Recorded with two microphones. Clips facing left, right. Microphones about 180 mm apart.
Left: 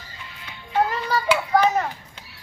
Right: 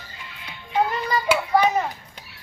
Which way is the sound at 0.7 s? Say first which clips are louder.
Even; 10° right (ahead or behind).